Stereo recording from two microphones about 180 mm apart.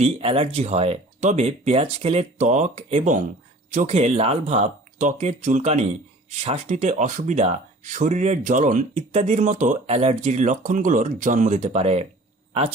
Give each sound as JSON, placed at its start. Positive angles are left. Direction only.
{"t": 0.0, "sound": "speech", "side_deg": -30}